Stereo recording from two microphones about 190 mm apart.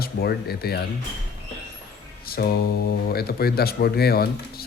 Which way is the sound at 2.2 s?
50° left (ahead or behind).